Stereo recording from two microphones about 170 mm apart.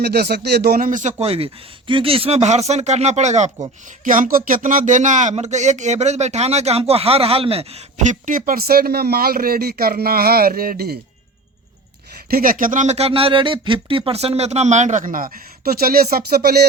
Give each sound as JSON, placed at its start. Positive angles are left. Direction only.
{"t": 0.0, "sound": "speech", "side_deg": -70}
{"t": 12.3, "sound": "speech", "side_deg": -55}